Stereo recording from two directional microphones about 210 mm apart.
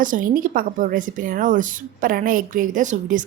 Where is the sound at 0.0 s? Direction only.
40° right (ahead or behind).